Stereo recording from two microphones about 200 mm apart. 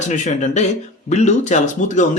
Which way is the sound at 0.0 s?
35° left (ahead or behind).